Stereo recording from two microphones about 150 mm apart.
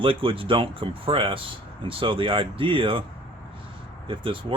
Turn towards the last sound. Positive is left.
turn(degrees=-35)  # may be behind; listen again after turning